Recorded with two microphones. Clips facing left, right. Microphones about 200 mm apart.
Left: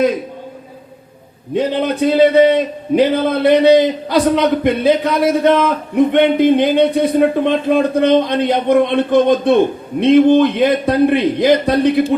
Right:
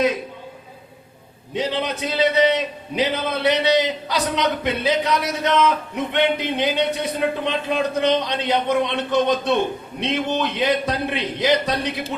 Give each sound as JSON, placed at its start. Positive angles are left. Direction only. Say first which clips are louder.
{"t": 1.5, "sound": "a man's voice", "louder": "left 8 dB", "side_deg": 50}